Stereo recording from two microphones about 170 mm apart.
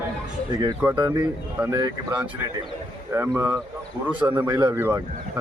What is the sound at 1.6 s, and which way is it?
Speech, 20° right (ahead or behind).